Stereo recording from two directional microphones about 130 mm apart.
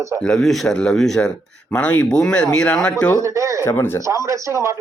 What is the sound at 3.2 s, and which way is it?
Speech, 25° right (ahead or behind).